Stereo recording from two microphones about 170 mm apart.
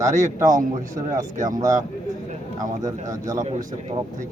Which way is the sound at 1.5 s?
20° right (ahead or behind).